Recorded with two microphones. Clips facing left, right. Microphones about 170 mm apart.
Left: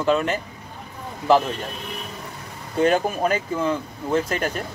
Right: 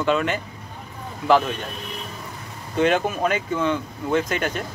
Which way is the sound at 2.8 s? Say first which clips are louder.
Left 1 dB; 35° left (ahead or behind).